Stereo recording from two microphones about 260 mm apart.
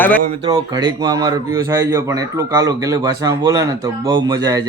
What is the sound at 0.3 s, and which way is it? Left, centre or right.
Speech, centre.